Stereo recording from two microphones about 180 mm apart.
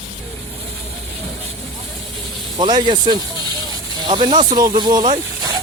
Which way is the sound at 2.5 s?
25° right (ahead or behind).